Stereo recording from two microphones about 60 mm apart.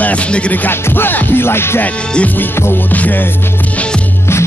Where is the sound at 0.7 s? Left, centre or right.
Left.